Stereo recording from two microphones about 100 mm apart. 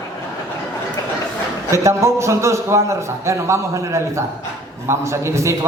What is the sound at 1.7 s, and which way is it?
A man's voice, 30° right (ahead or behind).